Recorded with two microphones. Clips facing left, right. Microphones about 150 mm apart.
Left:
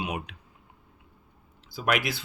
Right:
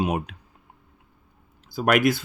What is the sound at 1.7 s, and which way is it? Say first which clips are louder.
Speech: right 8 dB; 50° right (ahead or behind).